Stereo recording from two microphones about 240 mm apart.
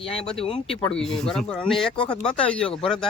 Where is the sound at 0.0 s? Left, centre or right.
Left.